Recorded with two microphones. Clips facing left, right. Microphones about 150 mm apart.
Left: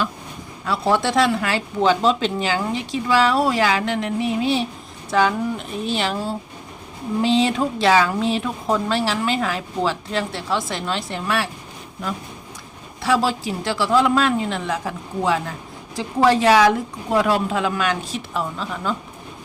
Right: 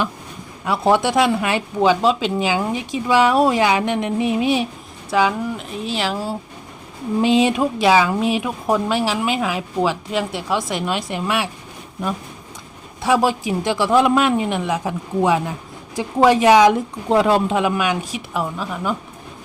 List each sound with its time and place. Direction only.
0.6 s speech: 15° right (ahead or behind)
5.1 s speech: 5° right (ahead or behind)
13.0 s speech: 15° right (ahead or behind)